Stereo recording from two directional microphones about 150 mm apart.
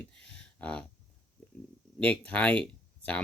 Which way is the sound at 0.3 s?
10° left (ahead or behind).